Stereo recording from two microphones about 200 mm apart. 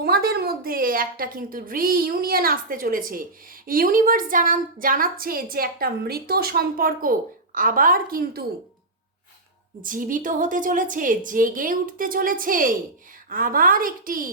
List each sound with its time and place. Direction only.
0.0 s a woman's voice: 50° right (ahead or behind)
9.8 s a woman's voice: 40° right (ahead or behind)